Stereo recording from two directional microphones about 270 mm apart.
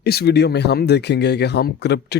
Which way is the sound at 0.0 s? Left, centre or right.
Left.